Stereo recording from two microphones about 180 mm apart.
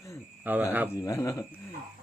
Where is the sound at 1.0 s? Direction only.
15° left (ahead or behind).